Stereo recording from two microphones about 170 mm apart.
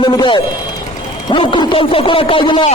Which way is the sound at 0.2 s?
30° left (ahead or behind).